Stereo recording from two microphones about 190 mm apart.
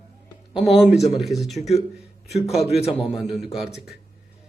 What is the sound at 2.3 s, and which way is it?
Speech, 35° left (ahead or behind).